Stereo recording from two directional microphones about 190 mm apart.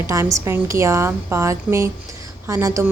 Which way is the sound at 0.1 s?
15° right (ahead or behind).